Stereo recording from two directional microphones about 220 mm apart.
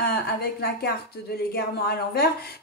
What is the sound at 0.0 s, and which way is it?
Speech, 45° left (ahead or behind).